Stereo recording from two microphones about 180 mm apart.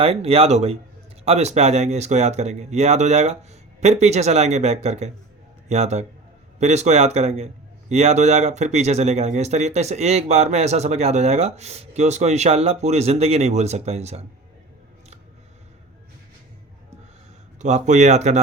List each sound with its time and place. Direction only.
0.0 s a man's voice: 35° right (ahead or behind)
17.6 s a man's voice: 40° right (ahead or behind)